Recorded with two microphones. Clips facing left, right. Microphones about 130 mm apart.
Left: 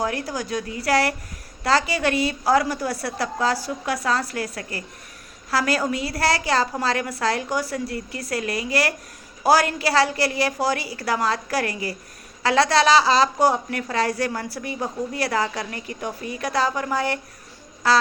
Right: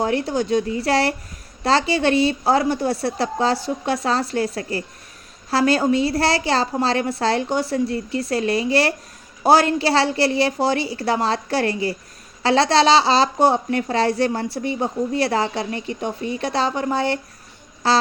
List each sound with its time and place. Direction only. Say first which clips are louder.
0.0 s a woman's voice: right 5 dB; 25° right (ahead or behind)